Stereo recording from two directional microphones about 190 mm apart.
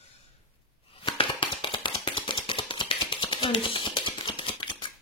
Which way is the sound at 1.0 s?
25° left (ahead or behind).